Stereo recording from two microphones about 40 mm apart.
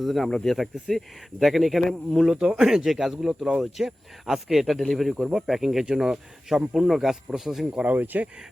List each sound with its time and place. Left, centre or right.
0.0 s speech: centre
5.1 s speech: centre
5.8 s speech: centre
7.9 s speech: right